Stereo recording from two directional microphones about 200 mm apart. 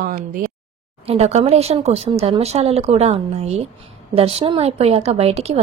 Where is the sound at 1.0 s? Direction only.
30° right (ahead or behind).